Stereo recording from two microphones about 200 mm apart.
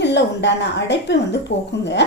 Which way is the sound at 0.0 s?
60° left (ahead or behind).